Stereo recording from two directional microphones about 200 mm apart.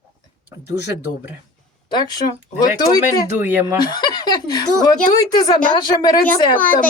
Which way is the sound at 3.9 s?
20° left (ahead or behind).